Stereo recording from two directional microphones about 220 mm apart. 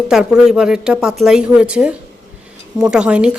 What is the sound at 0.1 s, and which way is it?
Speech, centre (ahead or behind).